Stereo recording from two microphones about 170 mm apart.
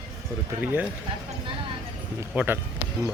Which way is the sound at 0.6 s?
10° right (ahead or behind).